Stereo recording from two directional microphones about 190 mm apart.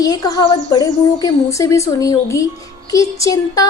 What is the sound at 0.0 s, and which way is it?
A woman's voice, 20° left (ahead or behind).